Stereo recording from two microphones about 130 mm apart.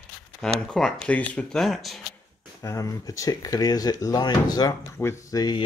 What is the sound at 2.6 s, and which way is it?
Speech, 25° left (ahead or behind).